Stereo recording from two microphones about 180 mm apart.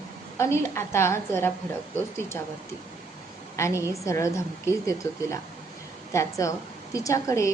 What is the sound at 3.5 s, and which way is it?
A woman's voice, 15° left (ahead or behind).